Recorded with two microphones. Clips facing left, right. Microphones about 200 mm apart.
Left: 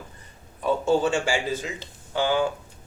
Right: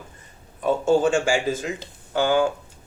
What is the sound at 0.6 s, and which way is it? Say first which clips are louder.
Speech: right 3 dB; 50° right (ahead or behind).